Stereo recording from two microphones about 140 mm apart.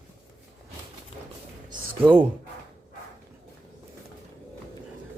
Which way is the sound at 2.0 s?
15° right (ahead or behind).